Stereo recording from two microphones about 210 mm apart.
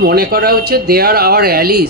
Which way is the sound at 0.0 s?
45° right (ahead or behind).